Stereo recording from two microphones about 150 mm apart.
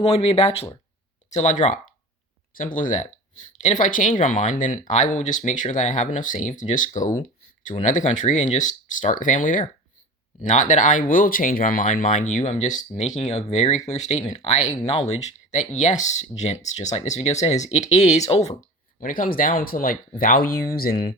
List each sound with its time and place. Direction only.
0.1 s speech: 40° left (ahead or behind)
1.3 s speech: 55° left (ahead or behind)
2.5 s speech: 65° left (ahead or behind); by 18.5 s 45° left (ahead or behind)
18.9 s speech: 65° left (ahead or behind); by 21.2 s 85° left